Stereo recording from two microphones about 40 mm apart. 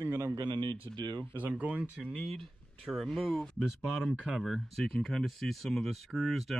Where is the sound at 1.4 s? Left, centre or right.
Right.